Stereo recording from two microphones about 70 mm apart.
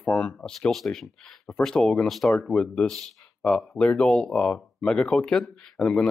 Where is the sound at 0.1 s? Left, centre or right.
Centre.